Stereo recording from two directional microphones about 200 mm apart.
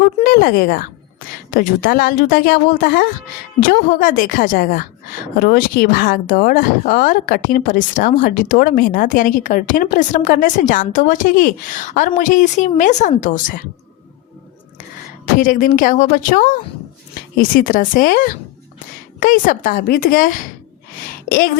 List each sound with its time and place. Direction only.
0.0 s a woman's voice: 45° left (ahead or behind)
15.4 s a woman's voice: 40° left (ahead or behind)